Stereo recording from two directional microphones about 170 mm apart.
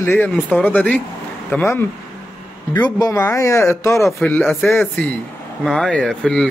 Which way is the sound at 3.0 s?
20° left (ahead or behind).